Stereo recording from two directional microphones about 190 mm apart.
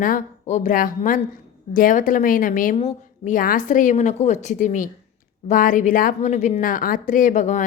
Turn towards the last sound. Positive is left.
turn(degrees=40)  # may be behind; listen again after turning